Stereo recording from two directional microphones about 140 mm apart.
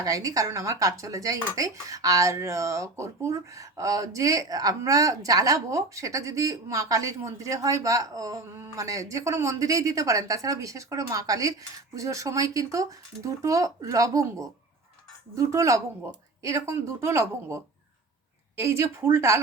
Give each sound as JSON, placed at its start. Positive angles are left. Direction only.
{"t": 0.0, "sound": "speech", "side_deg": -25}